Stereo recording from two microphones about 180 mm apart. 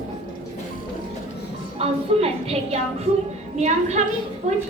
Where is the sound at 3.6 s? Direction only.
40° right (ahead or behind).